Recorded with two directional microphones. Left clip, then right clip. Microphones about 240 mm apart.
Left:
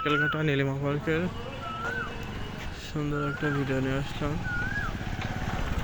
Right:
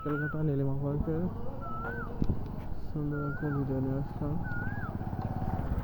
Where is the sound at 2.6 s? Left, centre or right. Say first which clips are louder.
Left 5 dB; left.